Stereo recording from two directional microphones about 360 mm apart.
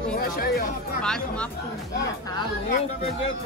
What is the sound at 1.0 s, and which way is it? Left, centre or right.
Speech, centre.